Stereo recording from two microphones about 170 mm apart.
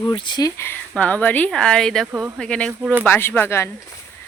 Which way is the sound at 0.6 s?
15° left (ahead or behind).